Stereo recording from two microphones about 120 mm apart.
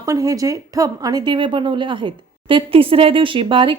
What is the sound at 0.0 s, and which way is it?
A woman's voice, 30° right (ahead or behind).